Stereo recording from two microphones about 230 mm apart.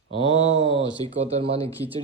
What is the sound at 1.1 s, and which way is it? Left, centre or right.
Speech, right.